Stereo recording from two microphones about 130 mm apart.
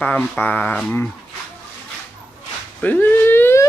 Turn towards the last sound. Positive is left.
turn(degrees=20)  # may be behind; listen again after turning